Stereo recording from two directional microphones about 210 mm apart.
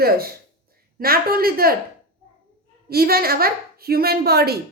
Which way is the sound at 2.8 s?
45° right (ahead or behind).